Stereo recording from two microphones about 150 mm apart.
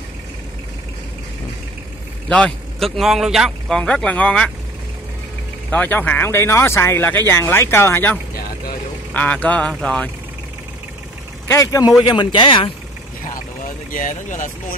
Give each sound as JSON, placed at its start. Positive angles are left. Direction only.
{"t": 2.2, "sound": "a man's voice", "side_deg": 5}
{"t": 5.7, "sound": "speech", "side_deg": 10}
{"t": 11.4, "sound": "speech", "side_deg": 20}
{"t": 12.0, "sound": "speech", "side_deg": 30}
{"t": 13.9, "sound": "speech", "side_deg": 55}